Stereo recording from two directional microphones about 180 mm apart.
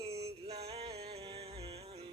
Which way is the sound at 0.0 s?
35° right (ahead or behind).